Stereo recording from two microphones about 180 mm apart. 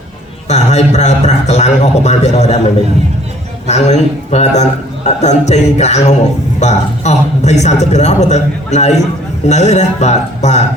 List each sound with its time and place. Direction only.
0.4 s a man's voice: 40° left (ahead or behind)
3.7 s a man's voice: 40° left (ahead or behind)